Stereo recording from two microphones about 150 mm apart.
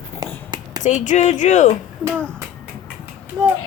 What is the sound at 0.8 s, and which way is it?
Speech, 55° left (ahead or behind).